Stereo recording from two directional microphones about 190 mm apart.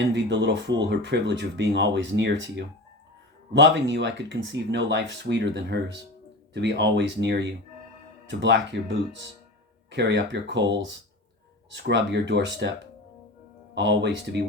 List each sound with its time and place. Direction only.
0.0 s speech: 65° right (ahead or behind)